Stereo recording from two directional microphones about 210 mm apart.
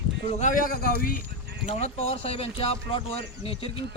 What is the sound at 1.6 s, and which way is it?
Speech, 30° left (ahead or behind).